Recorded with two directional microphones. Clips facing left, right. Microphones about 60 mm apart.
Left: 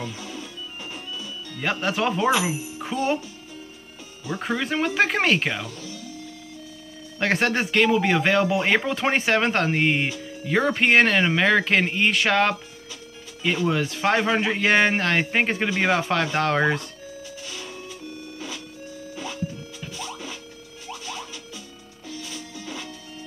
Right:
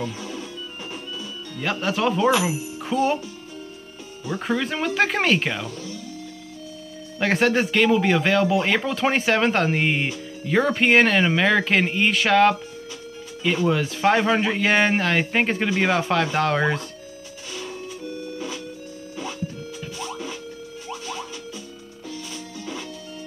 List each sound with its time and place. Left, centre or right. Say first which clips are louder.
1.6 s speech: right 1 dB; centre
4.3 s speech: right 1 dB; centre
7.2 s speech: right 2 dB; centre
13.7 s speech: right 3 dB; centre
20.0 s music: right 3 dB; right